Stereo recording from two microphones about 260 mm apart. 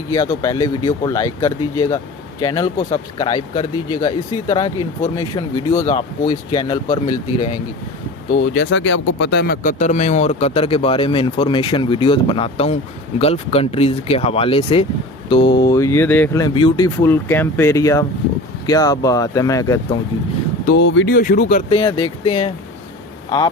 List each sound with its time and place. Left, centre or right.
0.1 s speech: centre
8.4 s speech: left; by 20.0 s centre
20.7 s speech: left
21.7 s speech: centre